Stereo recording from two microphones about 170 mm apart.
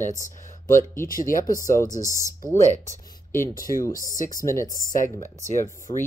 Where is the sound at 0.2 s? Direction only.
50° left (ahead or behind).